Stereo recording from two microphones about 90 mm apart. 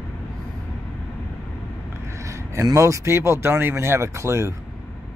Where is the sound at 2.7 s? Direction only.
35° right (ahead or behind).